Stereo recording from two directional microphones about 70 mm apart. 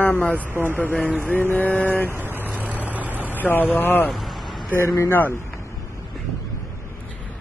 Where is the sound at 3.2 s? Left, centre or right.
Left.